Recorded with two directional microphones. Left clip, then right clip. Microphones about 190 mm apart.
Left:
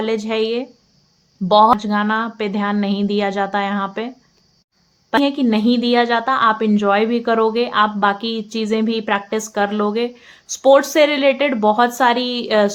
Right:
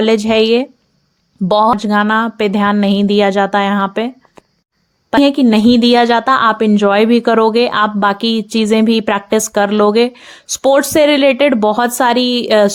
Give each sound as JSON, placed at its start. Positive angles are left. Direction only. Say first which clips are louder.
{"t": 0.0, "sound": "a woman's voice", "louder": "right 8 dB", "side_deg": -45}
{"t": 5.1, "sound": "a woman's voice", "louder": "right 6 dB", "side_deg": -45}